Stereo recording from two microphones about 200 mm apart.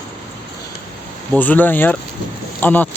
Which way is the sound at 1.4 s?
10° left (ahead or behind).